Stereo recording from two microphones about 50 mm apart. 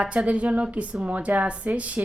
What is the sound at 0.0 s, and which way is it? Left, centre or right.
A woman's voice, right.